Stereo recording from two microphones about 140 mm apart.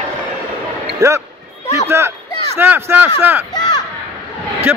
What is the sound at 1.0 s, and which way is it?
A man's voice, 20° right (ahead or behind).